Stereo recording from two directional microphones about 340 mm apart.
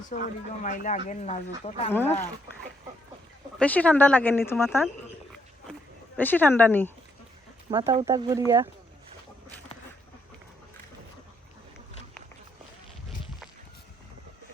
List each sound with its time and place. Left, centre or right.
0.0 s speech: left
1.9 s speech: centre
3.6 s speech: centre
6.1 s speech: centre
7.7 s speech: centre